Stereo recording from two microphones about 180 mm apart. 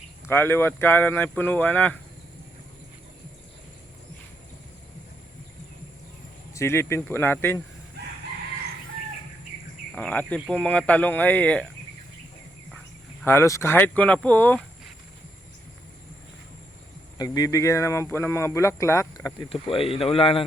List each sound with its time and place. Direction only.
0.3 s speech: 10° left (ahead or behind)
6.5 s speech: 15° left (ahead or behind)
9.9 s speech: 5° left (ahead or behind)
13.2 s speech: 15° left (ahead or behind)
17.2 s speech: 20° left (ahead or behind)
19.5 s speech: 30° left (ahead or behind)